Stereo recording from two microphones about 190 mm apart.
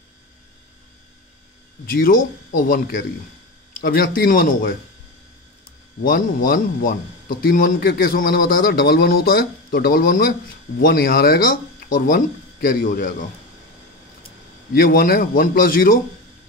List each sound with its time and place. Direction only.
1.9 s a man's voice: 50° left (ahead or behind)
6.0 s a man's voice: 50° left (ahead or behind)
14.7 s a man's voice: 50° left (ahead or behind)